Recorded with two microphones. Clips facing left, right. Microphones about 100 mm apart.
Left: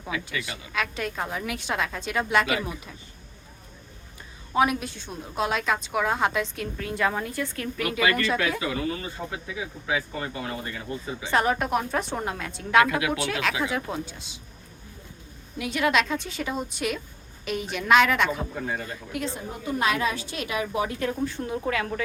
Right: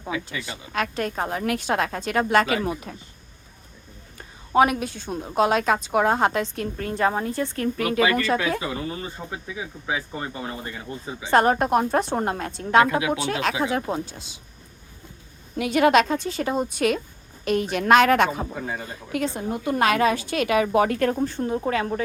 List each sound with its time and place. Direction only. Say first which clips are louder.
0.3 s a woman's voice: even; 30° right (ahead or behind)
0.7 s a woman's voice: right 4 dB; 45° right (ahead or behind)
4.5 s a woman's voice: right 4 dB; 50° right (ahead or behind); by 11.3 s 25° right (ahead or behind)
11.3 s a woman's voice: right 5 dB; 40° right (ahead or behind)
12.5 s a woman's voice: right 2 dB; 30° right (ahead or behind)
15.5 s a woman's voice: right 6 dB; 60° right (ahead or behind)
19.1 s a woman's voice: right 7 dB; 60° right (ahead or behind)
21.2 s a woman's voice: right 4 dB; 35° right (ahead or behind)